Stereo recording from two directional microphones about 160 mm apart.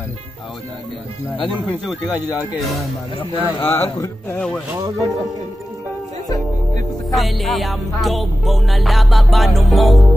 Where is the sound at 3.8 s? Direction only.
20° left (ahead or behind).